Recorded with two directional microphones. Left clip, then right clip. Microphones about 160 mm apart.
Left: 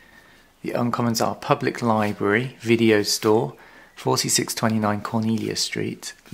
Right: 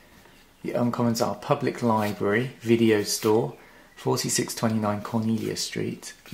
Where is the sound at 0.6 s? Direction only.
30° left (ahead or behind).